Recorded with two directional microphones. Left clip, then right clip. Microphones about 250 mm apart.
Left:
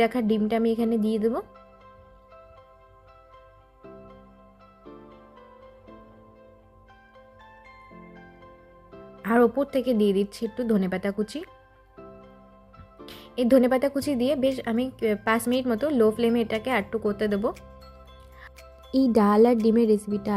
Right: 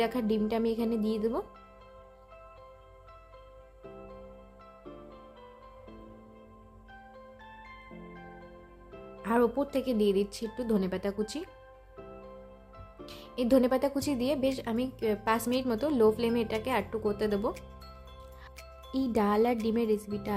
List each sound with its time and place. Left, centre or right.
0.0 s speech: centre
9.2 s speech: centre
13.1 s speech: centre
18.4 s music: centre
19.6 s speech: centre